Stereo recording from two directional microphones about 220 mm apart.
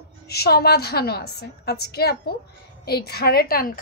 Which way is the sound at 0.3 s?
45° left (ahead or behind).